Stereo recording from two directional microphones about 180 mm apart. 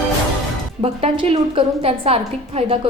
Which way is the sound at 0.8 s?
35° right (ahead or behind).